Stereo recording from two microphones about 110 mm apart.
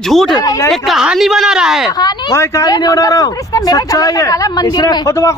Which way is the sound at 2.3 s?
30° left (ahead or behind).